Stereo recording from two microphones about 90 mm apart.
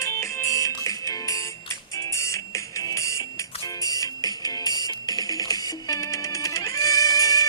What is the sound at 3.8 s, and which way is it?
Music, 45° left (ahead or behind).